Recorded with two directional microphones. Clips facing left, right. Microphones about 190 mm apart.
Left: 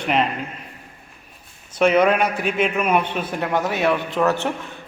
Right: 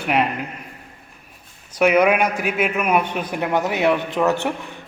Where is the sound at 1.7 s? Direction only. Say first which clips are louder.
Even; 10° right (ahead or behind).